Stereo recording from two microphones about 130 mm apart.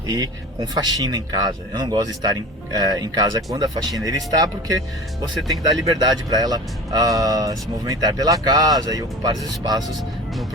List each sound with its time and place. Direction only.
0.1 s speech: 30° right (ahead or behind)
5.5 s speech: 30° right (ahead or behind)